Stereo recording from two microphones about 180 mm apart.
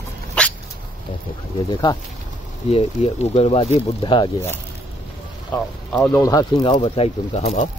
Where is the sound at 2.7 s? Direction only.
35° left (ahead or behind).